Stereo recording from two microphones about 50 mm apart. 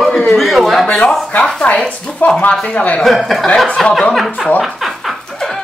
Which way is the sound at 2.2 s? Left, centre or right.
Left.